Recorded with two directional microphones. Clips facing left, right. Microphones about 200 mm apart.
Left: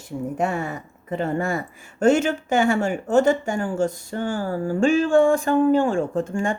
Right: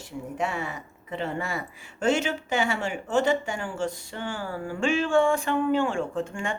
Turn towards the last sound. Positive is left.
turn(degrees=45)  # may be behind; listen again after turning